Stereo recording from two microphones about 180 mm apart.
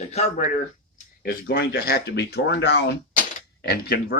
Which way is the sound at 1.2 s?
60° left (ahead or behind).